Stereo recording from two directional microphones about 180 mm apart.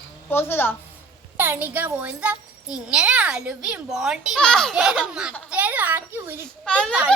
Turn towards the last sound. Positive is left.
turn(degrees=5)  # may be behind; listen again after turning